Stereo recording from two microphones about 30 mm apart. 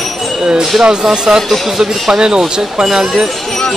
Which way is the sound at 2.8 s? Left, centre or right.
Centre.